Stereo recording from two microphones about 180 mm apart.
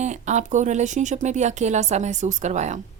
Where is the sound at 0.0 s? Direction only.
40° right (ahead or behind).